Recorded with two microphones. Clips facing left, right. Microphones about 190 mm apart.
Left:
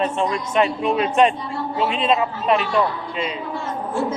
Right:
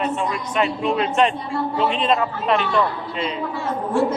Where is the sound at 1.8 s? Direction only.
Centre (ahead or behind).